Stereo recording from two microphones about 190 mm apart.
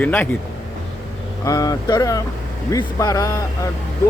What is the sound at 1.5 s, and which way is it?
Speech, 20° left (ahead or behind).